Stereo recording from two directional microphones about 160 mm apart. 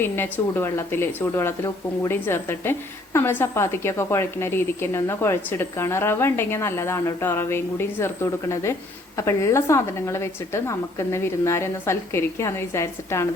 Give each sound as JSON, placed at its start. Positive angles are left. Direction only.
{"t": 0.0, "sound": "a woman's voice", "side_deg": 15}